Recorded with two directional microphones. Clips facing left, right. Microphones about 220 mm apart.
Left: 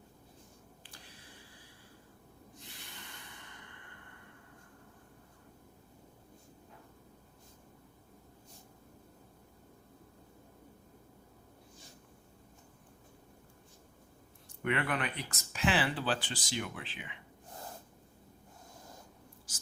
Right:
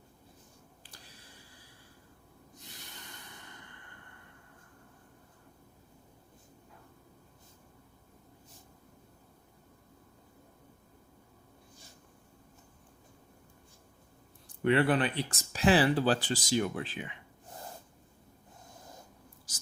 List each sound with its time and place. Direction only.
14.4 s speech: 30° right (ahead or behind)